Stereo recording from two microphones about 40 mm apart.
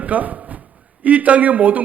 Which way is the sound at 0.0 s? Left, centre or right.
Right.